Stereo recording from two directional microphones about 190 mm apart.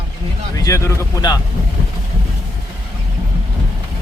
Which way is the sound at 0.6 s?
15° left (ahead or behind).